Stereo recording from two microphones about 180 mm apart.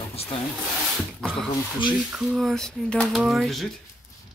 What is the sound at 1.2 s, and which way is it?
Speech, 5° right (ahead or behind).